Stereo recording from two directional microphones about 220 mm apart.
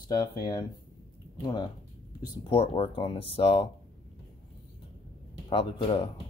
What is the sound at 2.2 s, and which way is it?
Speech, 25° left (ahead or behind).